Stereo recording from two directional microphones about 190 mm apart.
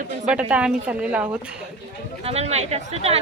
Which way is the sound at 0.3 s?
5° right (ahead or behind).